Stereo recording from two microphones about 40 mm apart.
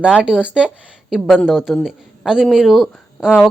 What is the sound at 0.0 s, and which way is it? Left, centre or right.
Speech, right.